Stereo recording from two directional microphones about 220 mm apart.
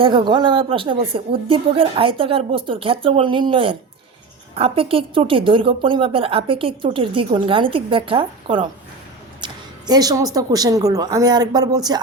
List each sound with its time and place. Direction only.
0.0 s a woman's voice: 20° right (ahead or behind)